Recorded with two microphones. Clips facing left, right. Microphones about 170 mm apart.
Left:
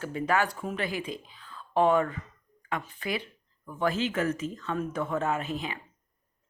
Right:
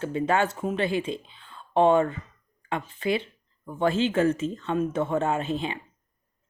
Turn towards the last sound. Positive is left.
turn(degrees=-25)  # may be behind; listen again after turning